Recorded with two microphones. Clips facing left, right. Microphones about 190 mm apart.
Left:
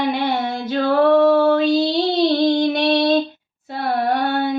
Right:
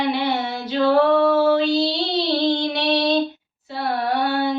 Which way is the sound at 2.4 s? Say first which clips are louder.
Left 4 dB; 50° left (ahead or behind).